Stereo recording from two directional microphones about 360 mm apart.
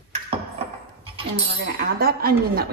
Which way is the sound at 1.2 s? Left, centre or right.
Centre.